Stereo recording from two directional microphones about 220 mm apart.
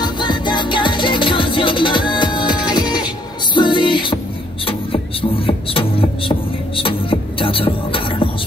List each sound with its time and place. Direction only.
0.0 s music: 20° left (ahead or behind)
4.6 s beatboxing: 25° left (ahead or behind)
6.8 s music: 25° left (ahead or behind)